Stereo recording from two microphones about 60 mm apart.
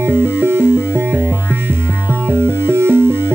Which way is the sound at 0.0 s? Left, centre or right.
Right.